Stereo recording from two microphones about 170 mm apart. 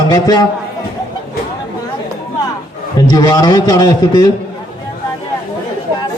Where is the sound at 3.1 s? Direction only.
25° left (ahead or behind).